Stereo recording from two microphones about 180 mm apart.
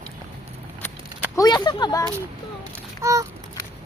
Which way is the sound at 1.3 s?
25° left (ahead or behind).